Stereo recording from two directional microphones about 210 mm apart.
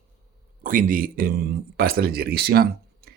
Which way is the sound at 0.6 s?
40° right (ahead or behind).